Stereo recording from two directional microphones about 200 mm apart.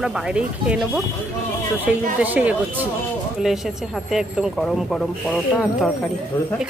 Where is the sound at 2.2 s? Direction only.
10° right (ahead or behind).